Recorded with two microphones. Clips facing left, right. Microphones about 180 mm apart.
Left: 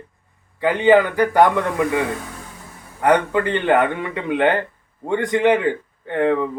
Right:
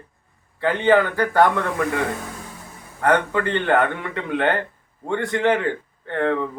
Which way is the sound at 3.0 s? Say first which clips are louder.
Left 3 dB; 15° left (ahead or behind).